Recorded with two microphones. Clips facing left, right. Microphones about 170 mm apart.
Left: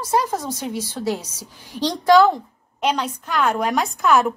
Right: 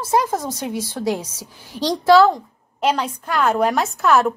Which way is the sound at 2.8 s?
5° right (ahead or behind).